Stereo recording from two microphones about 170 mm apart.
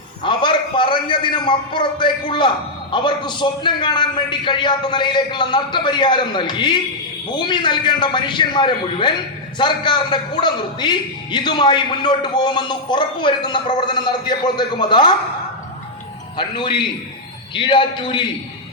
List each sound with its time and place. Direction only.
0.2 s a man's voice: 30° left (ahead or behind)
16.4 s a man's voice: 25° left (ahead or behind)